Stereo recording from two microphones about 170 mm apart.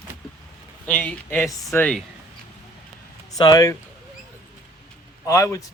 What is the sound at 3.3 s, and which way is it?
Speech, 25° left (ahead or behind).